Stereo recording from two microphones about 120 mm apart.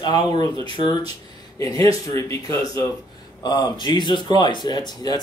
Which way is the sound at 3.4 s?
35° left (ahead or behind).